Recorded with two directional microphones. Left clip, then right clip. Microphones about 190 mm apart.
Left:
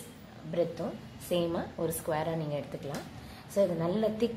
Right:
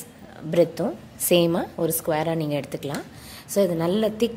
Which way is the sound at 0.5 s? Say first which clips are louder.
Right 11 dB; 55° right (ahead or behind).